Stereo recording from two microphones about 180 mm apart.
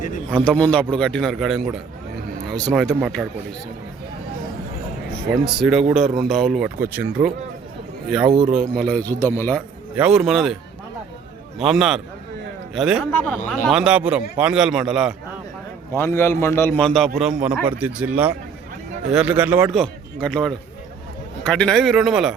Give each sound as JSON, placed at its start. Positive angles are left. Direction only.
{"t": 0.4, "sound": "a man's voice", "side_deg": 10}
{"t": 5.5, "sound": "a man's voice", "side_deg": -5}
{"t": 8.3, "sound": "speech", "side_deg": -25}
{"t": 8.7, "sound": "a man's voice", "side_deg": 5}
{"t": 9.6, "sound": "speech", "side_deg": -5}
{"t": 11.6, "sound": "a man's voice", "side_deg": -5}
{"t": 15.9, "sound": "a man's voice", "side_deg": 15}